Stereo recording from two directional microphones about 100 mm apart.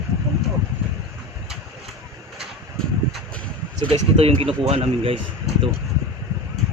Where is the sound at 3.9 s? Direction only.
75° right (ahead or behind).